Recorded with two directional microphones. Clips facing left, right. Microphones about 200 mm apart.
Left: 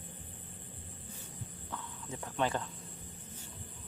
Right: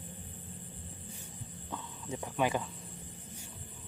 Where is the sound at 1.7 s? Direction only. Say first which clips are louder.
Right 4 dB; 15° right (ahead or behind).